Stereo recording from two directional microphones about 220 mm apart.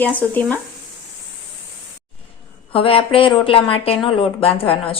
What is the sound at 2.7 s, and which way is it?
Speech, 25° left (ahead or behind).